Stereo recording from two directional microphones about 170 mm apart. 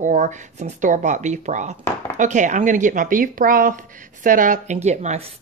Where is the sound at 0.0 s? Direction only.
45° right (ahead or behind).